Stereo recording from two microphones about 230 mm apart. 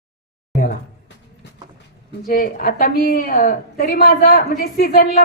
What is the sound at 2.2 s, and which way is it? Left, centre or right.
A woman's voice, left.